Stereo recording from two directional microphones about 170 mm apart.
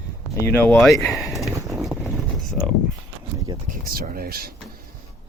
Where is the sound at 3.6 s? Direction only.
60° right (ahead or behind).